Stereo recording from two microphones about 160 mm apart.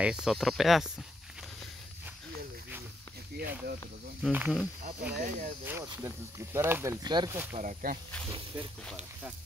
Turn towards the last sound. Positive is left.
turn(degrees=-55)  # may be behind; listen again after turning